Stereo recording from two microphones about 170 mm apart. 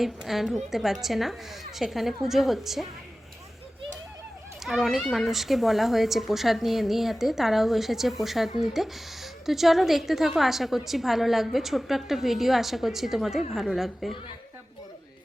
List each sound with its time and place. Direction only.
0.0 s a woman's voice: centre (ahead or behind)
4.6 s a woman's voice: centre (ahead or behind)